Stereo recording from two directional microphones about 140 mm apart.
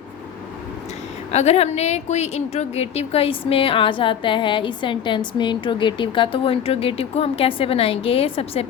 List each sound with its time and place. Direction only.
1.3 s a woman's voice: 50° left (ahead or behind)